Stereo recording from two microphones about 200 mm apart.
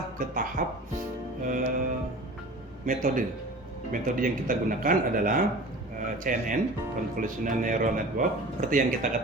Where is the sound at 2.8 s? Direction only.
40° right (ahead or behind).